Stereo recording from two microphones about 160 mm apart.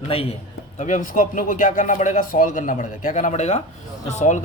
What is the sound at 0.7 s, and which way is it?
Speech, 50° left (ahead or behind).